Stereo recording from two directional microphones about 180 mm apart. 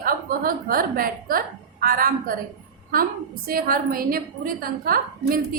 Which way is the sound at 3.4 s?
55° right (ahead or behind).